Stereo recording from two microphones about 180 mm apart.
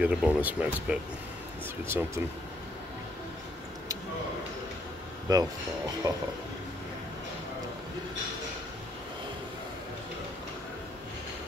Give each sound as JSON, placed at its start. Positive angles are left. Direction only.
{"t": 0.0, "sound": "speech", "side_deg": -5}
{"t": 5.3, "sound": "speech", "side_deg": -20}